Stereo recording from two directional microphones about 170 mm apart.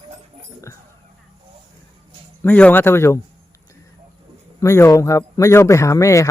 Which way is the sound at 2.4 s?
10° left (ahead or behind).